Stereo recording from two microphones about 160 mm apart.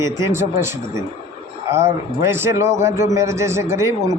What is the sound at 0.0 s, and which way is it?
A man's voice, 15° right (ahead or behind).